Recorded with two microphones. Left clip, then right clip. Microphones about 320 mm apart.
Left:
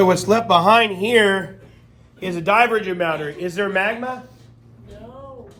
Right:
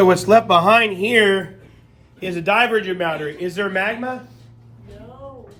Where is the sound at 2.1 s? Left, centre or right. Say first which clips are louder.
Left 1 dB; centre.